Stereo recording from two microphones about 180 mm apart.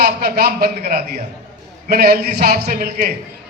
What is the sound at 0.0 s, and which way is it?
A man's voice, 55° right (ahead or behind).